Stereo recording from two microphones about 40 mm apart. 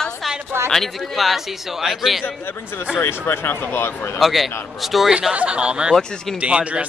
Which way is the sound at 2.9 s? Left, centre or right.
Left.